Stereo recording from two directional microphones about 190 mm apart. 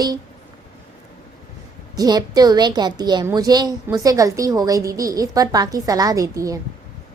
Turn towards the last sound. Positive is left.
turn(degrees=-15)  # may be behind; listen again after turning